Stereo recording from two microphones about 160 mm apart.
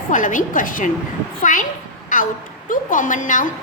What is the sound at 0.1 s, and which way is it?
A woman's voice, 55° left (ahead or behind).